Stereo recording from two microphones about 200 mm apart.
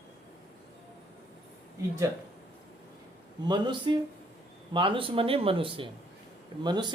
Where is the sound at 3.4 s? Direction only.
20° right (ahead or behind).